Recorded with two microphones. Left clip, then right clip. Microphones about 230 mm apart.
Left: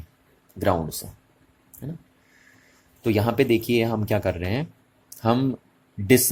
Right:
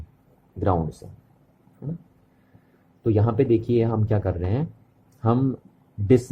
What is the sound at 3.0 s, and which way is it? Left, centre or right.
Speech, centre.